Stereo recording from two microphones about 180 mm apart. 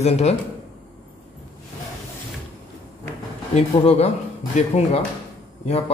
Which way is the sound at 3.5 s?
35° left (ahead or behind).